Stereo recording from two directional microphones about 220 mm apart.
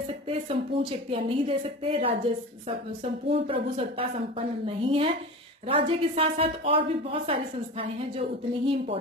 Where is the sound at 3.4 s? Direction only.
25° right (ahead or behind).